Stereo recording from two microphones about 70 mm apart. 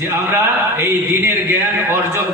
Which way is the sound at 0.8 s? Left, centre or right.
Right.